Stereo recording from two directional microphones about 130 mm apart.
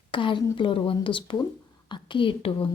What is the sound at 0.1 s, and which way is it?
A woman's voice, 40° left (ahead or behind).